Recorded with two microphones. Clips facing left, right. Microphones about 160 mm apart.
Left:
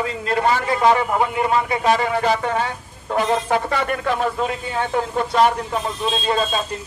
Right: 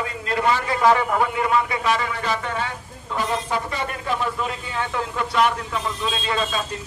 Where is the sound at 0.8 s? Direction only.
25° left (ahead or behind).